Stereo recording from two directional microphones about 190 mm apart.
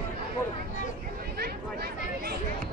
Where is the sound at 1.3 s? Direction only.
55° right (ahead or behind).